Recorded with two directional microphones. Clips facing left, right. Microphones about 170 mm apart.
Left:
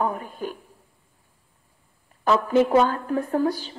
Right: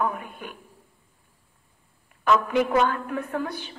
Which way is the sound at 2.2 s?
35° left (ahead or behind).